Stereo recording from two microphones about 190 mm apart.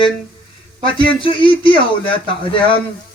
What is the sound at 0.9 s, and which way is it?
Speech, 25° left (ahead or behind).